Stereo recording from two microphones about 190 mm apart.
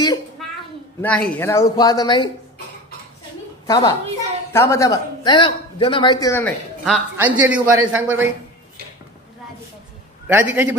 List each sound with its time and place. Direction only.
1.0 s speech: 5° left (ahead or behind); by 2.3 s 25° left (ahead or behind)
3.6 s a woman's voice: 20° left (ahead or behind)
6.8 s a man's voice: 5° right (ahead or behind)
10.2 s a man's voice: 10° right (ahead or behind)